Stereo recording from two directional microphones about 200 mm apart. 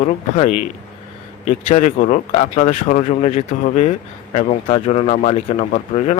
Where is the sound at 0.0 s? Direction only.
35° left (ahead or behind).